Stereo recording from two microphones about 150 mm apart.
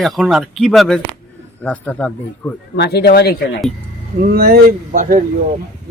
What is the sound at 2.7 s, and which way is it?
Speech, 90° left.